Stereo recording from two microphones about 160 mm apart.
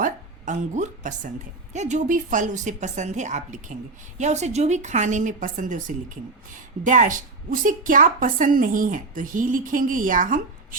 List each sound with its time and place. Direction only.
0.0 s a woman's voice: 50° right (ahead or behind)